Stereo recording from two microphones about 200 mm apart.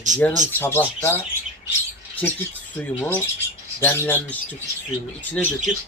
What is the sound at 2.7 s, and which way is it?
Speech, 10° left (ahead or behind).